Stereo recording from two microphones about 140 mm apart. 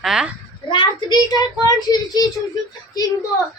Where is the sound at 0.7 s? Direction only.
35° left (ahead or behind).